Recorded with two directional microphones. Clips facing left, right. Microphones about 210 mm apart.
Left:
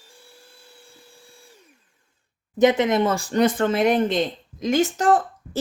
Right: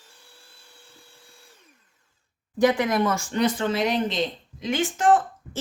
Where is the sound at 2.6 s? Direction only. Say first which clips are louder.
Left 3 dB; 20° left (ahead or behind).